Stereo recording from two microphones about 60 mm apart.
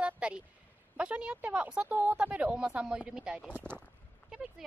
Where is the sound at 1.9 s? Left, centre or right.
Right; by 3.5 s centre.